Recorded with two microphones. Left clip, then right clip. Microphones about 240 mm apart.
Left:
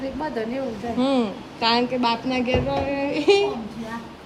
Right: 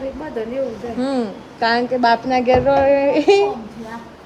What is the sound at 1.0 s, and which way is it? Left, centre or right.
Speech, left.